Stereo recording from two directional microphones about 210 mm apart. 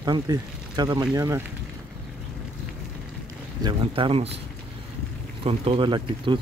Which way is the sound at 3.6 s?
25° right (ahead or behind).